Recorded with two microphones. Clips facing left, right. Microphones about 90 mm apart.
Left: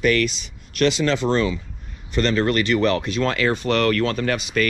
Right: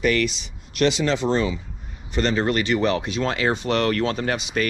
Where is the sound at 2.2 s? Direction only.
65° left (ahead or behind).